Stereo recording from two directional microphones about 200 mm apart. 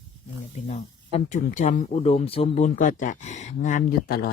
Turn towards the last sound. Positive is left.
turn(degrees=45)  # may be behind; listen again after turning